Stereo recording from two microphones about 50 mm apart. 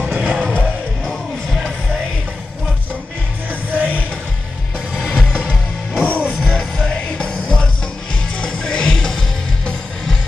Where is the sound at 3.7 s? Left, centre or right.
Right.